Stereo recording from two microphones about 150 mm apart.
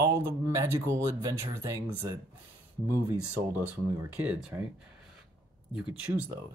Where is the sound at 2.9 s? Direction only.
15° right (ahead or behind).